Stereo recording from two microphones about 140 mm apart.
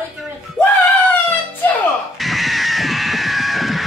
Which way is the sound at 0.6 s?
Centre (ahead or behind).